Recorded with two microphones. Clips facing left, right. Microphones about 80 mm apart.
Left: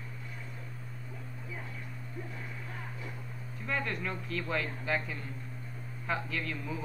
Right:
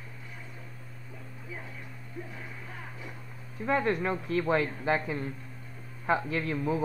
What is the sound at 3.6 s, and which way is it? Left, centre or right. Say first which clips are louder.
Speech: right 8 dB; right.